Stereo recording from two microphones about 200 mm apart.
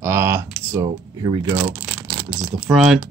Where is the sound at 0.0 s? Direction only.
15° right (ahead or behind).